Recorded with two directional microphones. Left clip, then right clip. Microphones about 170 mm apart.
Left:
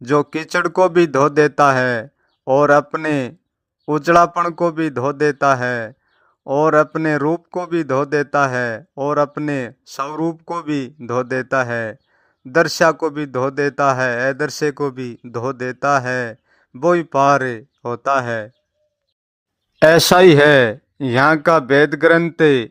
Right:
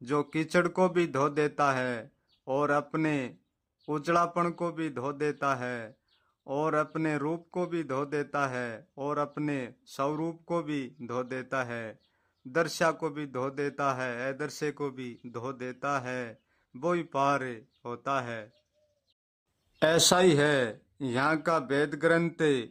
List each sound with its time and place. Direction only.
0.0 s speech: 35° left (ahead or behind)
19.8 s speech: 35° left (ahead or behind)